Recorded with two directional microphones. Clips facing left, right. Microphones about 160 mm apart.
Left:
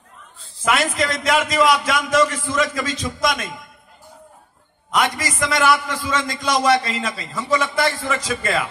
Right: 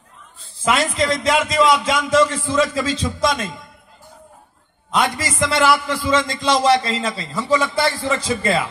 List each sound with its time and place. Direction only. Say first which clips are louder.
0.7 s a man's voice: right 2 dB; 25° right (ahead or behind)
4.9 s a man's voice: right 1 dB; 30° right (ahead or behind)